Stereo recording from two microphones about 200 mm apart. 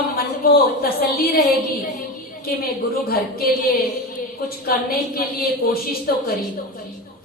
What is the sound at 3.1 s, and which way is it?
A woman's voice, 50° left (ahead or behind).